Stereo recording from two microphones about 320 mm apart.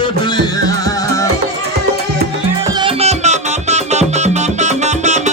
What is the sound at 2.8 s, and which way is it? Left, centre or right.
Music, centre.